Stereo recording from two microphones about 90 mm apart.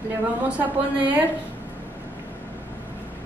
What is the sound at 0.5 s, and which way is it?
Speech, 20° right (ahead or behind).